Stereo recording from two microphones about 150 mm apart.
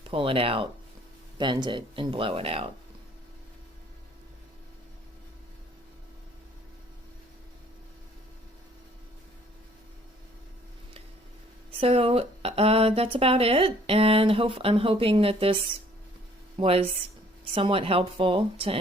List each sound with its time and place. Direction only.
0.0 s speech: 35° right (ahead or behind)
11.8 s speech: 40° right (ahead or behind)
16.6 s speech: 40° right (ahead or behind)